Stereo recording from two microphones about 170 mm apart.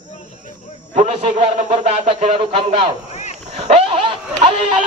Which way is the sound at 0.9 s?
40° right (ahead or behind).